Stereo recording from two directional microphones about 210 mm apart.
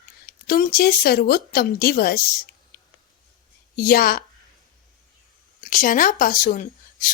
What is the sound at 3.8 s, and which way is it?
Speech, 45° left (ahead or behind).